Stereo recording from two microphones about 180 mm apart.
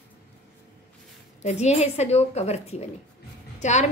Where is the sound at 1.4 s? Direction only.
35° left (ahead or behind).